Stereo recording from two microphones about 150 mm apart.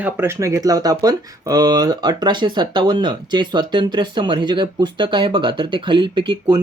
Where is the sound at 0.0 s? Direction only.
15° right (ahead or behind).